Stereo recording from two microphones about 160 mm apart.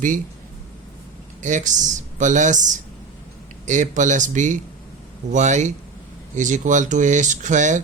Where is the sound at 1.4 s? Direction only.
50° right (ahead or behind).